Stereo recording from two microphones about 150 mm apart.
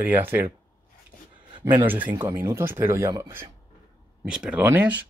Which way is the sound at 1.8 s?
10° right (ahead or behind).